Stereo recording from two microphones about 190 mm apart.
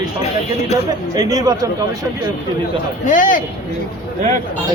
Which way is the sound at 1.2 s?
20° right (ahead or behind).